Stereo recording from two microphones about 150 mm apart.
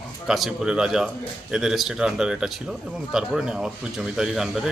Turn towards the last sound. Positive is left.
turn(degrees=0)  # may be behind; listen again after turning